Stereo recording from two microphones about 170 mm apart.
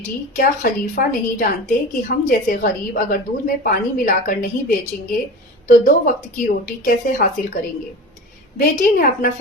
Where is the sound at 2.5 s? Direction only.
55° left (ahead or behind).